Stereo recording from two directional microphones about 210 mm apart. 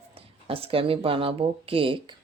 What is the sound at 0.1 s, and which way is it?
Speech, 25° right (ahead or behind).